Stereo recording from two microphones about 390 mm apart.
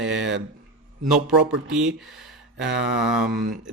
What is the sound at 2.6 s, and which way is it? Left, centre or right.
Mantra, right.